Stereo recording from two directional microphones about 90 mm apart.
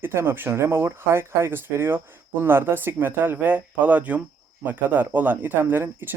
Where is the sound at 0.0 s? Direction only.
25° right (ahead or behind).